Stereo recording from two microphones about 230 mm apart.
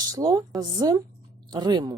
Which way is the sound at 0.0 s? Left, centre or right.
Centre.